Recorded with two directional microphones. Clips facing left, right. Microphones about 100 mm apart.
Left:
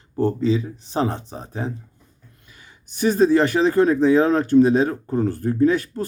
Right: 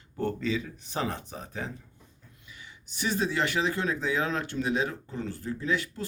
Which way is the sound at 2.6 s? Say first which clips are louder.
Left 12 dB; 45° left (ahead or behind).